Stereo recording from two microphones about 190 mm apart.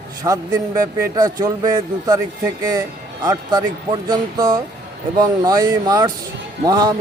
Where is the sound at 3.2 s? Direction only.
20° right (ahead or behind).